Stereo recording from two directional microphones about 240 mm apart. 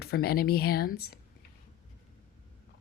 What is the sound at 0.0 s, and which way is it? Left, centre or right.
Speech, left.